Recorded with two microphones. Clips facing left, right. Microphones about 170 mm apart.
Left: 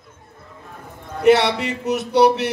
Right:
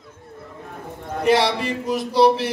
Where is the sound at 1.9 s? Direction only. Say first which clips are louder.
Left 1 dB; 65° left (ahead or behind).